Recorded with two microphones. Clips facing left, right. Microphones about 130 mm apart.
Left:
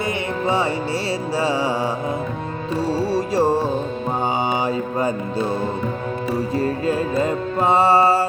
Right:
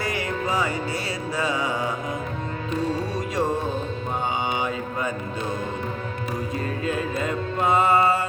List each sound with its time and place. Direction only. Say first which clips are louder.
0.4 s music: left 6 dB; 30° left (ahead or behind)
4.6 s music: left 6 dB; 35° left (ahead or behind)
6.6 s music: left 5 dB; 35° left (ahead or behind)